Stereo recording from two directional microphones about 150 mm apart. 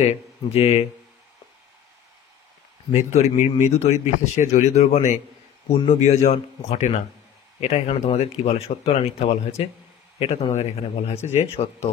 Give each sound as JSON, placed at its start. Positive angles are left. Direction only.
{"t": 0.0, "sound": "speech", "side_deg": 45}
{"t": 2.9, "sound": "speech", "side_deg": 50}
{"t": 6.0, "sound": "speech", "side_deg": 45}